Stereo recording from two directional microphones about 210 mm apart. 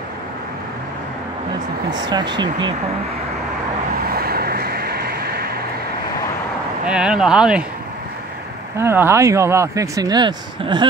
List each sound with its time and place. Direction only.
1.9 s speech: 20° right (ahead or behind)
4.0 s vehicle: 45° right (ahead or behind)
6.9 s speech: 5° right (ahead or behind)
8.7 s speech: 10° right (ahead or behind)